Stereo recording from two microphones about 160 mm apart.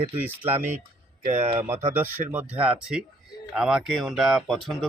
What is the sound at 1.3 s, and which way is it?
Speech, 45° right (ahead or behind).